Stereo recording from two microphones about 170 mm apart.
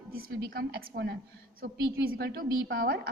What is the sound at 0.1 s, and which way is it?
A woman's voice, 60° right (ahead or behind).